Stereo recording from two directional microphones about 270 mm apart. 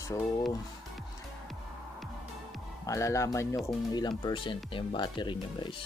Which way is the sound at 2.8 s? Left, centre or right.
Centre.